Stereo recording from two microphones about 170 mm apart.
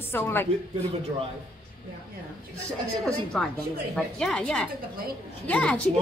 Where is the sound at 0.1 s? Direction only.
15° left (ahead or behind).